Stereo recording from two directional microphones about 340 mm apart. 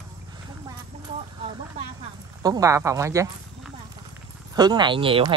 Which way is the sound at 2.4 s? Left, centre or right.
Centre.